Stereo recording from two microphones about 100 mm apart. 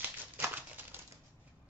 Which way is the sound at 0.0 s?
15° right (ahead or behind).